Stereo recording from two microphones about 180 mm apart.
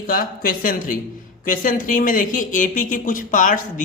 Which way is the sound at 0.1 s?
50° left (ahead or behind).